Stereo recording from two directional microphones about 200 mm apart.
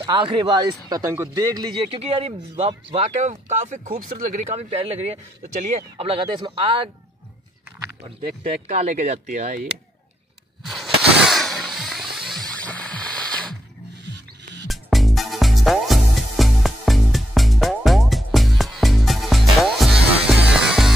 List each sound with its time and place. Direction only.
0.0 s speech: 25° right (ahead or behind)
2.0 s speech: 30° right (ahead or behind)
8.6 s speech: 35° right (ahead or behind)
10.6 s a sound: centre (ahead or behind)
14.7 s music: centre (ahead or behind)